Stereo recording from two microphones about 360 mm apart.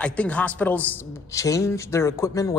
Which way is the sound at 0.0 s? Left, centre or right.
Centre.